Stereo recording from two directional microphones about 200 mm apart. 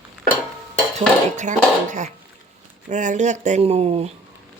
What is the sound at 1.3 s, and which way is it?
Speech, 35° right (ahead or behind).